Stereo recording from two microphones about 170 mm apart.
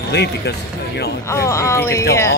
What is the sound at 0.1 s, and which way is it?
Speech, 75° left (ahead or behind).